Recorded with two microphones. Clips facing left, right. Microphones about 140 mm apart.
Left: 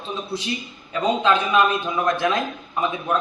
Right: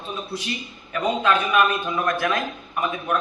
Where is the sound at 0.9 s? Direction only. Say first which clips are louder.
Left 2 dB; 20° left (ahead or behind).